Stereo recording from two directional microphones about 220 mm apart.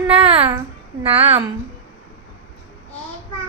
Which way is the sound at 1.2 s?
25° right (ahead or behind).